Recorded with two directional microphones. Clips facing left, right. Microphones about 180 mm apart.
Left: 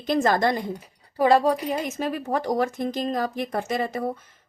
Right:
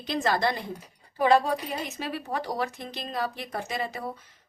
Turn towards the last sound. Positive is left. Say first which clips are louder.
# left 6 dB
turn(degrees=50)  # may be behind; listen again after turning